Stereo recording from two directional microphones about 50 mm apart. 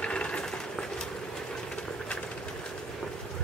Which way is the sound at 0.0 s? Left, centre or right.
Left.